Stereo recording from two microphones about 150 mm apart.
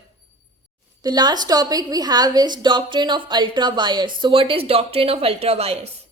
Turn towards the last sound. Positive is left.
turn(degrees=-45)  # may be behind; listen again after turning